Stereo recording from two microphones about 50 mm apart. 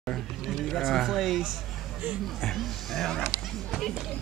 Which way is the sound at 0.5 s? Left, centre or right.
Centre.